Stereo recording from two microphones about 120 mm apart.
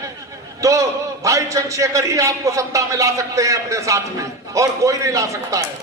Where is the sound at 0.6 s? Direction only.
25° right (ahead or behind).